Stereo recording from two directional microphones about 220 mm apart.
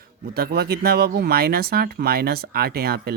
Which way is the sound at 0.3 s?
45° right (ahead or behind).